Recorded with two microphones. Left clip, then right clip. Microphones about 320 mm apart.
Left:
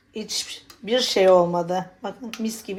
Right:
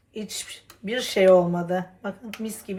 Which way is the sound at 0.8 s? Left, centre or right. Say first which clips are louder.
Left 2 dB; left.